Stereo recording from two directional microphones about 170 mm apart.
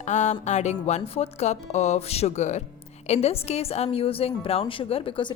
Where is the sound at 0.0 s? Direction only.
45° left (ahead or behind).